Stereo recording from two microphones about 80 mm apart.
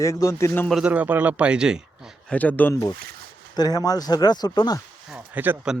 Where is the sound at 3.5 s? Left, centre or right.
Left.